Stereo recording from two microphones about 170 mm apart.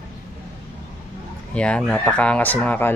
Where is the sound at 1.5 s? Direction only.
5° left (ahead or behind).